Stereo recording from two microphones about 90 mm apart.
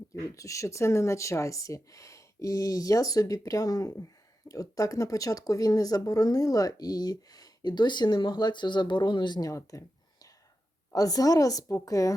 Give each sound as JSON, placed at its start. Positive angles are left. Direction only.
{"t": 0.1, "sound": "speech", "side_deg": 40}
{"t": 9.5, "sound": "a sound", "side_deg": 35}
{"t": 10.9, "sound": "speech", "side_deg": 45}